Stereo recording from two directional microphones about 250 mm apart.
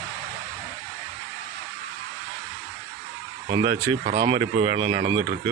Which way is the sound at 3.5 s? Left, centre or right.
Right.